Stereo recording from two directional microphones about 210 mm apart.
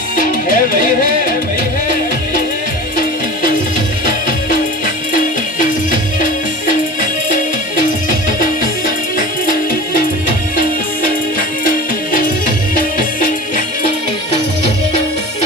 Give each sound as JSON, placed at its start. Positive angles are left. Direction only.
{"t": 0.2, "sound": "music", "side_deg": 40}
{"t": 5.1, "sound": "music", "side_deg": 40}
{"t": 9.1, "sound": "music", "side_deg": 40}
{"t": 11.3, "sound": "music", "side_deg": 40}